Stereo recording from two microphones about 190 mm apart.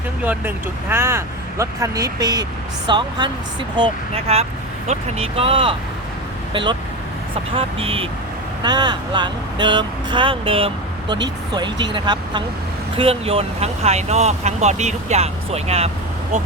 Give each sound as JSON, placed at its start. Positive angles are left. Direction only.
{"t": 0.2, "sound": "speech", "side_deg": -10}